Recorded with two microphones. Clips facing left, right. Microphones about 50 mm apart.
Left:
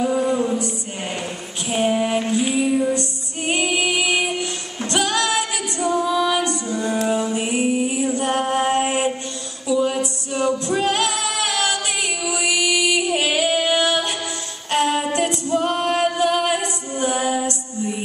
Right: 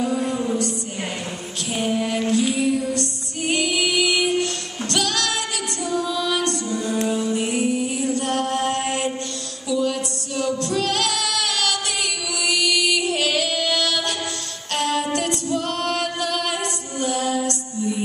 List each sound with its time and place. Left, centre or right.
0.0 s music: centre
1.7 s female singing: left
9.7 s music: centre
15.0 s female singing: centre